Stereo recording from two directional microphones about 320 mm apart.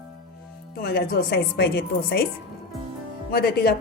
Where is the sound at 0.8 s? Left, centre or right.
Left.